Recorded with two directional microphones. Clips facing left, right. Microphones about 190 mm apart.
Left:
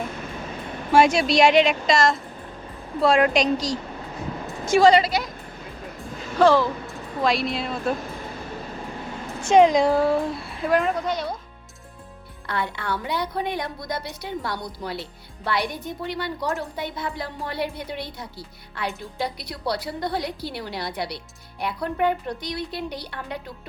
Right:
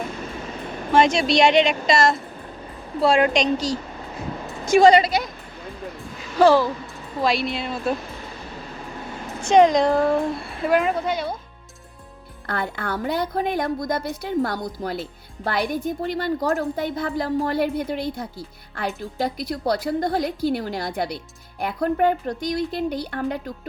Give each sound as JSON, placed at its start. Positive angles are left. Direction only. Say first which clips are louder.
{"t": 0.9, "sound": "speech", "louder": "even", "side_deg": 5}
{"t": 4.6, "sound": "a woman's voice", "louder": "right 2 dB", "side_deg": -15}
{"t": 6.4, "sound": "a woman's voice", "louder": "right 2 dB", "side_deg": -5}
{"t": 9.5, "sound": "speech", "louder": "right 1 dB", "side_deg": 5}
{"t": 12.5, "sound": "a woman's voice", "louder": "right 1 dB", "side_deg": -50}